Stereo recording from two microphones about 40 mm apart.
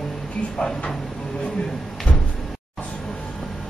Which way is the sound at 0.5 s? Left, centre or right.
Centre.